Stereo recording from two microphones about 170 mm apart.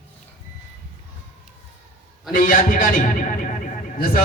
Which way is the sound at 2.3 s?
50° left (ahead or behind).